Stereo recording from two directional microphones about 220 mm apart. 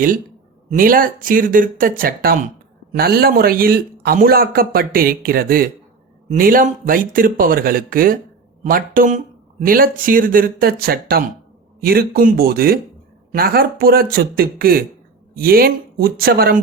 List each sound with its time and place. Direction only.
0.7 s a man's voice: 40° right (ahead or behind)